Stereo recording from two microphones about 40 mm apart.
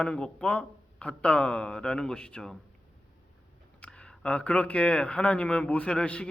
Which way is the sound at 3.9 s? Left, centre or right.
Left.